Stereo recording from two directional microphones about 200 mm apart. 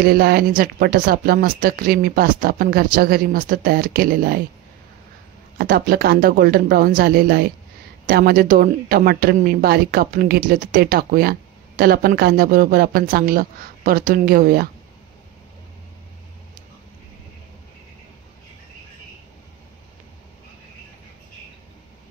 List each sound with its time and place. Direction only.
0.0 s speech: 50° right (ahead or behind)
5.6 s speech: 50° right (ahead or behind)